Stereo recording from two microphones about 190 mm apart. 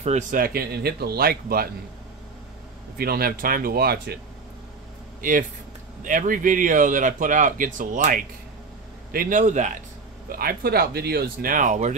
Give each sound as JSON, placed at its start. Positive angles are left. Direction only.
{"t": 0.0, "sound": "speech", "side_deg": -40}
{"t": 3.0, "sound": "speech", "side_deg": -50}
{"t": 6.0, "sound": "a man's voice", "side_deg": -45}
{"t": 10.3, "sound": "speech", "side_deg": -55}